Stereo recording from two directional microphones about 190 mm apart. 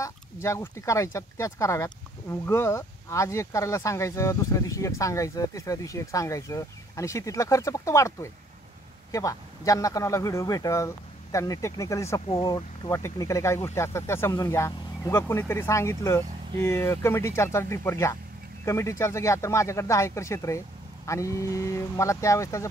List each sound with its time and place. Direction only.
0.0 s speech: 15° left (ahead or behind)